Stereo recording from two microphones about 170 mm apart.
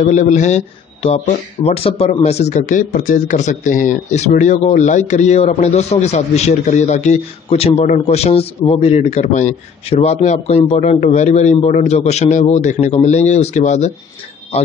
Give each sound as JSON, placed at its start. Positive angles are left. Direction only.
{"t": 0.0, "sound": "speech", "side_deg": 45}